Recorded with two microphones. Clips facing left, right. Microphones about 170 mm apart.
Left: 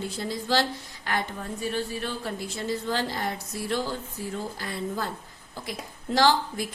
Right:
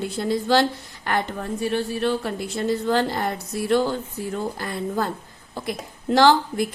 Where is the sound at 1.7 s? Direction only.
70° right (ahead or behind); by 5.0 s 55° right (ahead or behind).